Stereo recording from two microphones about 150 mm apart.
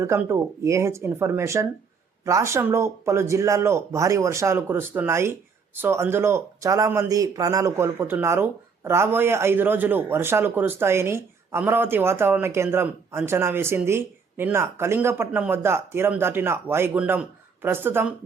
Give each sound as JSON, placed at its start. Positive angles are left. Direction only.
{"t": 0.0, "sound": "speech", "side_deg": -15}